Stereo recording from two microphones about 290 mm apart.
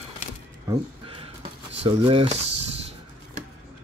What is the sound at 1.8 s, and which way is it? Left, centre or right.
Speech, centre.